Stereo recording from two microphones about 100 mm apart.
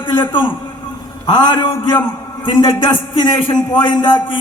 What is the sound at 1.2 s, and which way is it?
A man's voice, 50° left (ahead or behind).